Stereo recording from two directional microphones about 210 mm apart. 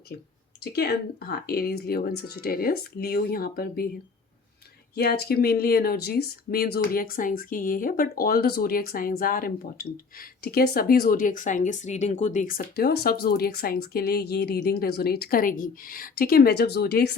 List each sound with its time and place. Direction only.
0.6 s speech: 50° left (ahead or behind)
4.9 s speech: 50° left (ahead or behind)